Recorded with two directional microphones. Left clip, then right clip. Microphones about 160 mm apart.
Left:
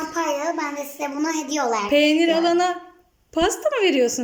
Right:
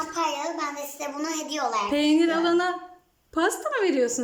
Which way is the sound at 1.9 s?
5° left (ahead or behind).